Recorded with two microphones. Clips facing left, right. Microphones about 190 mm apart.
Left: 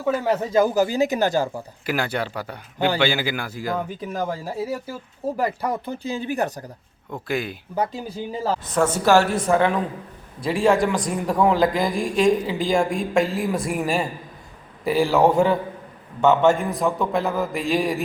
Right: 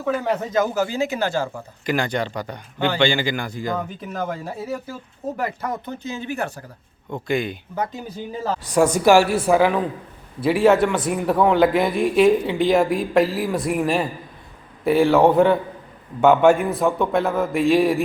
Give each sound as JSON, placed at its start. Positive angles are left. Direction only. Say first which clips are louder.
{"t": 0.0, "sound": "speech", "louder": "left 1 dB", "side_deg": 5}
{"t": 0.9, "sound": "speech", "louder": "left 3 dB", "side_deg": 40}
{"t": 1.3, "sound": "speech", "louder": "left 2 dB", "side_deg": 15}
{"t": 1.9, "sound": "speech", "louder": "right 2 dB", "side_deg": 5}
{"t": 6.0, "sound": "speech", "louder": "left 3 dB", "side_deg": 35}
{"t": 7.1, "sound": "a man's voice", "louder": "right 3 dB", "side_deg": 0}
{"t": 8.7, "sound": "a man's voice", "louder": "right 3 dB", "side_deg": -15}